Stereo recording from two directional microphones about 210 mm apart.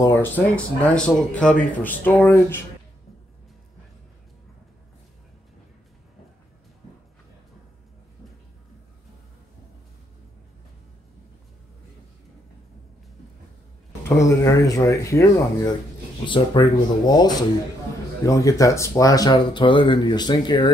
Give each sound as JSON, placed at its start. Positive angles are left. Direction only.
{"t": 0.0, "sound": "speech", "side_deg": 10}
{"t": 14.0, "sound": "speech", "side_deg": 15}